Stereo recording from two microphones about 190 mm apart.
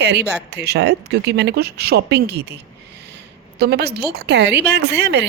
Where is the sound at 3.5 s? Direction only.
60° right (ahead or behind).